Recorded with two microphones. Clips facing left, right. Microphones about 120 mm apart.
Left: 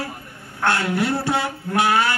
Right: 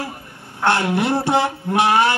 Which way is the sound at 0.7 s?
25° right (ahead or behind).